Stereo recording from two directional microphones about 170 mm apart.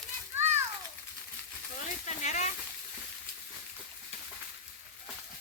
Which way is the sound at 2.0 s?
45° left (ahead or behind).